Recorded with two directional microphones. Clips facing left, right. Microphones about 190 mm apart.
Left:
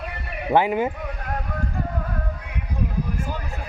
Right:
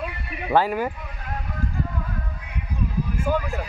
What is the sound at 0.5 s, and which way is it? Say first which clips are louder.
Speech: left 2 dB; 20° left (ahead or behind).